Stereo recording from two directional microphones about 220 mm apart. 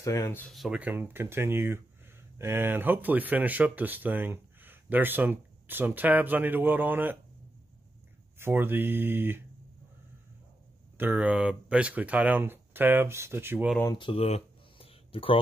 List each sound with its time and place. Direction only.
0.0 s speech: 15° left (ahead or behind); by 7.2 s 10° right (ahead or behind)
8.4 s speech: 10° right (ahead or behind)
11.0 s speech: 5° right (ahead or behind)
13.7 s speech: 20° left (ahead or behind)